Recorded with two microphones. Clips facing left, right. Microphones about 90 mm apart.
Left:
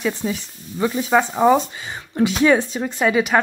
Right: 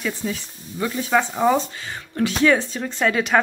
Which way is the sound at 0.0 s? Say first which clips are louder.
Left 3 dB; 20° left (ahead or behind).